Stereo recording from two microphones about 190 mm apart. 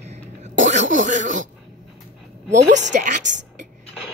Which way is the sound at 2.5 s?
40° right (ahead or behind).